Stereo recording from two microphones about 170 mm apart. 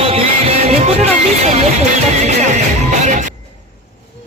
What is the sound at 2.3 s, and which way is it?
Music, 45° right (ahead or behind).